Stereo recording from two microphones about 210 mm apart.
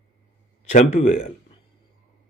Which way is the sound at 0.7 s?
35° left (ahead or behind).